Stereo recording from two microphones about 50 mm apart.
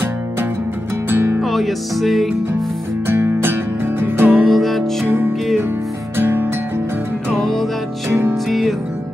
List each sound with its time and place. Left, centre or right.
1.0 s music: right
1.4 s music: centre
3.1 s music: right
4.5 s music: centre
5.0 s music: right
7.3 s music: centre